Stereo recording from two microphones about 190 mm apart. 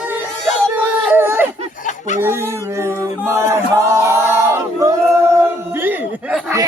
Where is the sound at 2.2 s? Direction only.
10° right (ahead or behind).